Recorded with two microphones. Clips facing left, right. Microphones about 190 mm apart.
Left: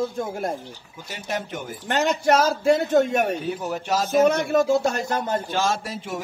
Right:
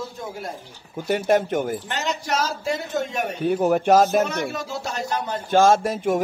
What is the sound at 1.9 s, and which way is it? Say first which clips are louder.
A man's voice: left 6 dB; 55° left (ahead or behind).